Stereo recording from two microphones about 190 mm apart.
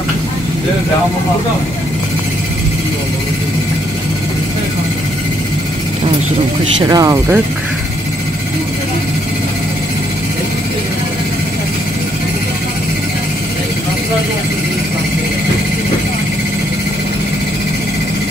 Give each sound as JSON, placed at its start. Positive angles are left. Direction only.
{"t": 6.8, "sound": "speech", "side_deg": -20}